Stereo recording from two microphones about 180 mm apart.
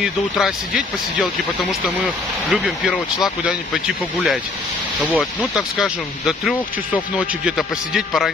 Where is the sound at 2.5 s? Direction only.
Centre (ahead or behind).